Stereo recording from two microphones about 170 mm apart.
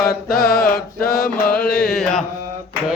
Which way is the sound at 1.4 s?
65° left (ahead or behind).